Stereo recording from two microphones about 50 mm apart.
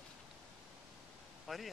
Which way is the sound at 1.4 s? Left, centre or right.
Centre.